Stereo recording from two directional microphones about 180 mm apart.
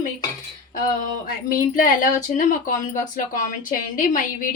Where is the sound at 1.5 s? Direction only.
50° left (ahead or behind).